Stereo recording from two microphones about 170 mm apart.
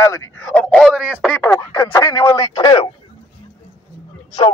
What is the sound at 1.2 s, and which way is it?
Speech, 5° left (ahead or behind).